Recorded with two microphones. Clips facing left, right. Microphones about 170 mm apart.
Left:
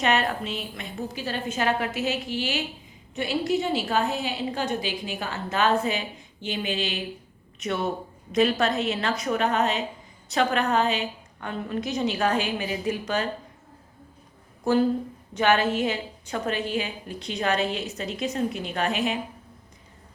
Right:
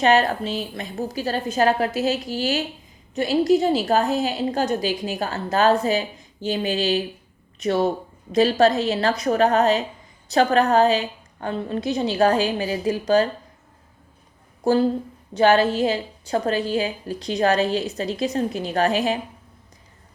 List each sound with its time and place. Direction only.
0.0 s a woman's voice: 35° right (ahead or behind)
14.6 s a woman's voice: 30° right (ahead or behind)